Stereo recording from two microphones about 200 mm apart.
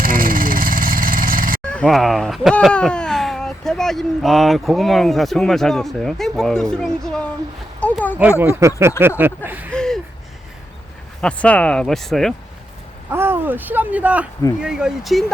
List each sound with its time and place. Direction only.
0.0 s vehicle: 45° right (ahead or behind)
1.7 s speech: 5° left (ahead or behind)
8.2 s speech: 5° right (ahead or behind)
9.7 s a sound: 5° left (ahead or behind)
11.2 s speech: 5° left (ahead or behind)
13.1 s speech: 10° right (ahead or behind)